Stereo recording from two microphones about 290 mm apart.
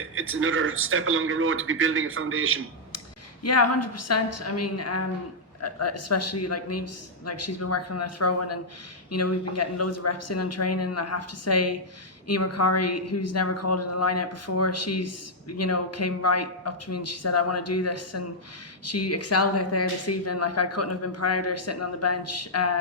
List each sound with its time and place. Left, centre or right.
0.1 s speech: right
3.4 s a woman's voice: left